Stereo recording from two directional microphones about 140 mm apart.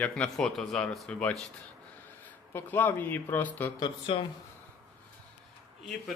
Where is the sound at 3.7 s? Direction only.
35° left (ahead or behind).